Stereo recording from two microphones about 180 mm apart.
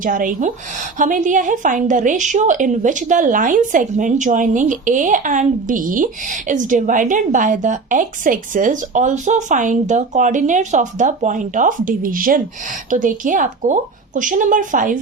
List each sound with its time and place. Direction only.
0.0 s a woman's voice: 50° right (ahead or behind)